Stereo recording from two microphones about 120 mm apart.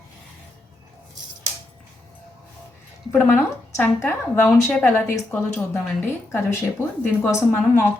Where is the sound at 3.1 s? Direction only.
20° left (ahead or behind).